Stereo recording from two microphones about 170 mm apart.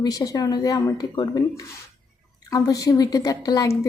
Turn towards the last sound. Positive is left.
turn(degrees=20)  # may be behind; listen again after turning